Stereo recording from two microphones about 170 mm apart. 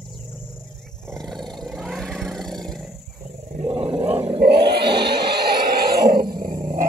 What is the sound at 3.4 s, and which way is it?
Dog, 40° right (ahead or behind).